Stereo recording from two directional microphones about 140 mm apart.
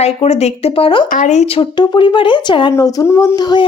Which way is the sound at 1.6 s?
35° left (ahead or behind).